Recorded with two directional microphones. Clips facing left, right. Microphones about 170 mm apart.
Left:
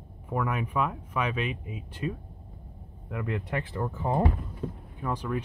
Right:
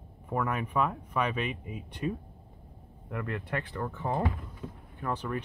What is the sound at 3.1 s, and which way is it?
Speech, 15° left (ahead or behind).